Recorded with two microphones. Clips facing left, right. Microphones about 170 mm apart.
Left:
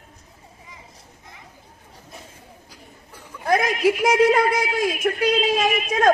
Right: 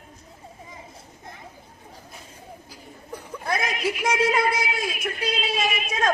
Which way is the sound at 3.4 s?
45° left (ahead or behind).